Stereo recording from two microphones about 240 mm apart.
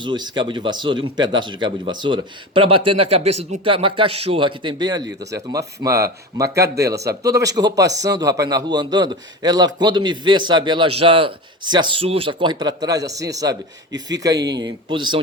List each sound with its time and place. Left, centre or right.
0.0 s speech: centre